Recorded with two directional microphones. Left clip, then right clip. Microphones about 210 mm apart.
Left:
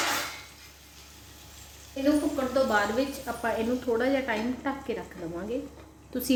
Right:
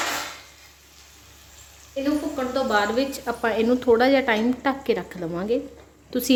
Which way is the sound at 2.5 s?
30° right (ahead or behind).